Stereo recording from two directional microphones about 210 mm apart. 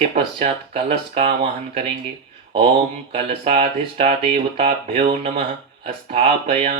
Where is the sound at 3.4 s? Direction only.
30° right (ahead or behind).